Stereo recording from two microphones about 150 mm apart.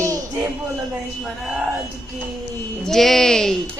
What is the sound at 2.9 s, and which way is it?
Speech, centre (ahead or behind).